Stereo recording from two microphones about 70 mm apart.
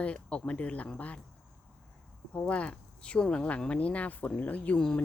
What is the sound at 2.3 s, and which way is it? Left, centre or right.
Speech, centre.